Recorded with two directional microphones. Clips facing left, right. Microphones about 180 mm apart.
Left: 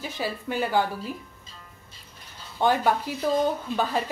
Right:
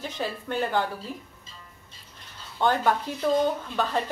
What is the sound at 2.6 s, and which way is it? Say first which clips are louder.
Speech: left 1 dB; 10° left (ahead or behind).